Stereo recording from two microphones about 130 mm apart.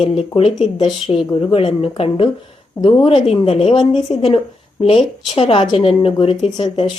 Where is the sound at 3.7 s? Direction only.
40° left (ahead or behind).